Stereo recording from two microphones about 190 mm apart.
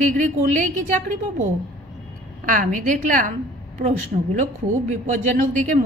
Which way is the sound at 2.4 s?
40° right (ahead or behind).